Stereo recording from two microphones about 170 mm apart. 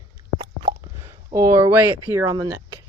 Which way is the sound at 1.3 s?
15° right (ahead or behind).